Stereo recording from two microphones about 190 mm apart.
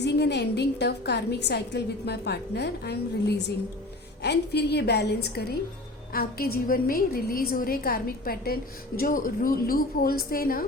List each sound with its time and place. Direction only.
0.0 s a woman's voice: 60° left (ahead or behind)